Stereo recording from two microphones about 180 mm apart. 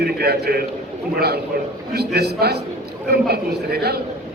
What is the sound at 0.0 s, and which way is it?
A man's voice, 60° right (ahead or behind).